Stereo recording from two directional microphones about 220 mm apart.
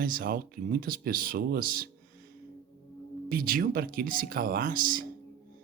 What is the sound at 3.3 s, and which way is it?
Speech, 40° right (ahead or behind).